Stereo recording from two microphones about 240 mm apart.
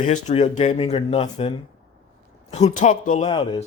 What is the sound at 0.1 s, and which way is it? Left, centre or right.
A man's voice, left.